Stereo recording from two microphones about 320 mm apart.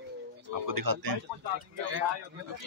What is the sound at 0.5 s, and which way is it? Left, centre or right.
Speech, right.